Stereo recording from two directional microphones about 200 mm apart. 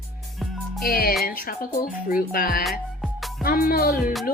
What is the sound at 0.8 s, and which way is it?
Speech, 50° left (ahead or behind).